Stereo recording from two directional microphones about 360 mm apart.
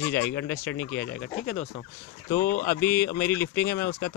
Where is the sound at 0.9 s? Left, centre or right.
Left.